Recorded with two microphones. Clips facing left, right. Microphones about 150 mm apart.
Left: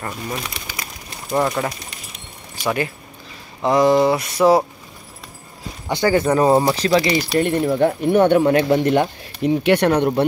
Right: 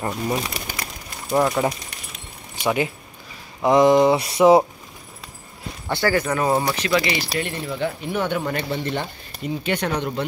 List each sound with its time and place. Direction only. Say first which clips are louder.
0.7 s a sound: right 1 dB; 50° right (ahead or behind)
1.3 s speech: even; centre (ahead or behind)
2.6 s speech: even; 15° right (ahead or behind)
5.9 s speech: left 4 dB; 20° left (ahead or behind)
6.2 s speech: left 6 dB; 30° left (ahead or behind)
7.3 s speech: left 9 dB; 50° left (ahead or behind)